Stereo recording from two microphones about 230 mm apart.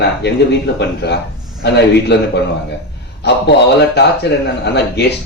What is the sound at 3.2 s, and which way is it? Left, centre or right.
A man's voice, left.